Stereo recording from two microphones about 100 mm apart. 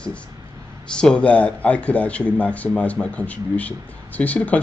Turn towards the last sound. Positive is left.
turn(degrees=15)  # may be behind; listen again after turning